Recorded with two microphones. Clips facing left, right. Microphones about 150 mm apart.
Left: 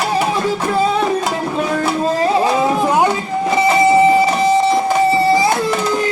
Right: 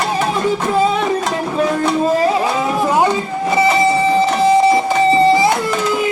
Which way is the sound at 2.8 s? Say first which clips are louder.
Even; 15° left (ahead or behind).